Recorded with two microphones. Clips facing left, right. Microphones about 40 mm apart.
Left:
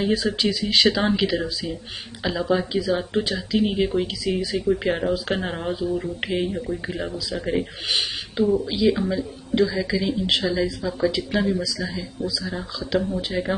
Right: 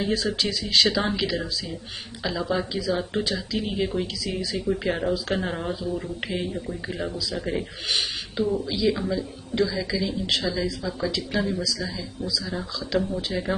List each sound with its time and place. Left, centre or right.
0.0 s speech: centre
4.8 s speech: centre